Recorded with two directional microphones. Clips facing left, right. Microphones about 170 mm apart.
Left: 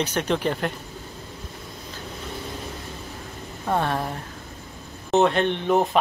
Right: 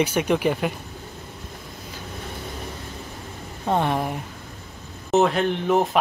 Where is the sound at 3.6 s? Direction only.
15° right (ahead or behind).